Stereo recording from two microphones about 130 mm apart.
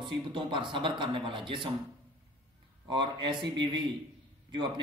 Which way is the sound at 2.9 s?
40° right (ahead or behind).